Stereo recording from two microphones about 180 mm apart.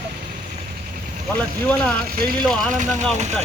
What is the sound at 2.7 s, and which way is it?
Speech, 45° right (ahead or behind).